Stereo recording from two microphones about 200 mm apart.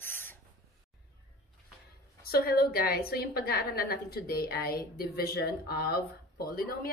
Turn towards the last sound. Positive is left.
turn(degrees=50)  # may be behind; listen again after turning